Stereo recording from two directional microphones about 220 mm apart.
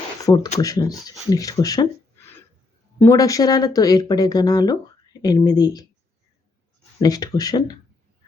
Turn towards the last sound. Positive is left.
turn(degrees=20)  # may be behind; listen again after turning